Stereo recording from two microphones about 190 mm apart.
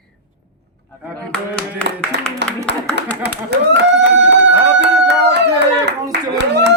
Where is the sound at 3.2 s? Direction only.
65° right (ahead or behind).